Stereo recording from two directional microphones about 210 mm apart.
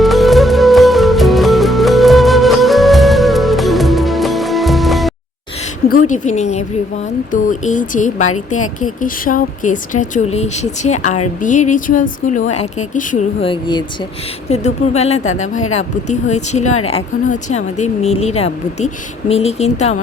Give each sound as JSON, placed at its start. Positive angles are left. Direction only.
{"t": 0.0, "sound": "music", "side_deg": 0}
{"t": 6.1, "sound": "speech", "side_deg": 35}
{"t": 13.4, "sound": "speech", "side_deg": 20}